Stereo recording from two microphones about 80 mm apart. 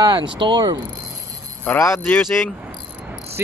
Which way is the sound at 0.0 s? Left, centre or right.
Right.